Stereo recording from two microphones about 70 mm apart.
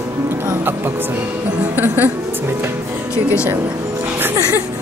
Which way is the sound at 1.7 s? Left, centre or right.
Right.